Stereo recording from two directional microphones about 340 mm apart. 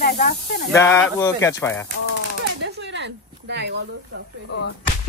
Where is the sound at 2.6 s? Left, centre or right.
Right.